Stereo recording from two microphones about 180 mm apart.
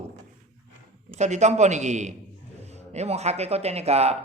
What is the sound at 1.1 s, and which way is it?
Speech, 40° right (ahead or behind).